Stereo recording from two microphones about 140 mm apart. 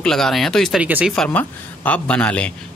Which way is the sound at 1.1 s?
10° left (ahead or behind).